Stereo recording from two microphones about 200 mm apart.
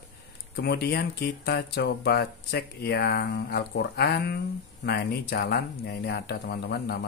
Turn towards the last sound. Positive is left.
turn(degrees=50)  # may be behind; listen again after turning